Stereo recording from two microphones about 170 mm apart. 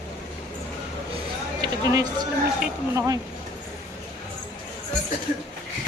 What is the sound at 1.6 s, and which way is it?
Speech, 25° right (ahead or behind).